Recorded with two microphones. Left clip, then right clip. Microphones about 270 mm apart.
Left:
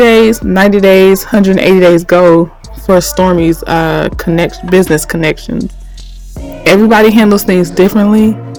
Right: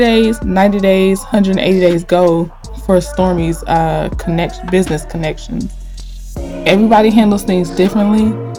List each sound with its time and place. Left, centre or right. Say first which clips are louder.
0.0 s speech: left 6 dB; left
6.7 s speech: left 4 dB; left